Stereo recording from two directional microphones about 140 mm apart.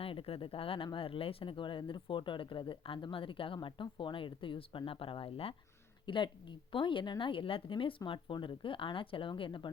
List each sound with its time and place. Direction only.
0.0 s speech: 40° left (ahead or behind)